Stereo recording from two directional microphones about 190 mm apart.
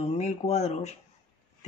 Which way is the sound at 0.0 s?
35° left (ahead or behind).